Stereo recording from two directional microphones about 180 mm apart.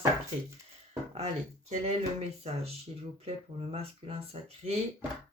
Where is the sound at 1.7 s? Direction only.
35° right (ahead or behind).